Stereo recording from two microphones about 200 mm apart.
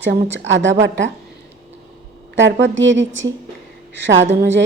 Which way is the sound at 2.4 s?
60° right (ahead or behind).